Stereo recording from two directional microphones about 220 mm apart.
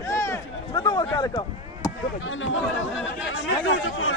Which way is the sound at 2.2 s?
60° left (ahead or behind).